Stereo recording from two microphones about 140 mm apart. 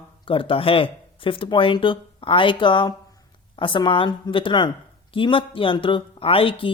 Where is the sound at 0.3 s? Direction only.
40° left (ahead or behind).